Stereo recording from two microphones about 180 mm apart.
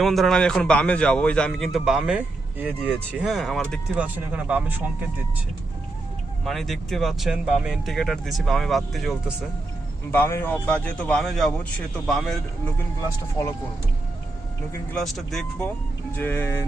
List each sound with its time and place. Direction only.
0.0 s a man's voice: centre (ahead or behind)
3.9 s speech: 10° right (ahead or behind)
6.4 s a man's voice: centre (ahead or behind)
10.1 s a man's voice: 15° left (ahead or behind)
13.4 s speech: 20° left (ahead or behind)
14.9 s a man's voice: centre (ahead or behind)